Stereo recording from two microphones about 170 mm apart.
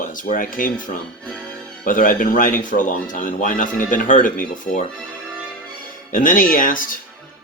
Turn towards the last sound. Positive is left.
turn(degrees=55)  # may be behind; listen again after turning